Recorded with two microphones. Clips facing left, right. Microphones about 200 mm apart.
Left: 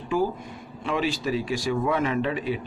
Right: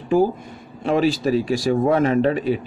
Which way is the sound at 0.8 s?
40° right (ahead or behind).